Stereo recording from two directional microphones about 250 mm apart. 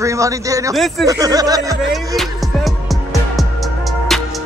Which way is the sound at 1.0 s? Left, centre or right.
Centre.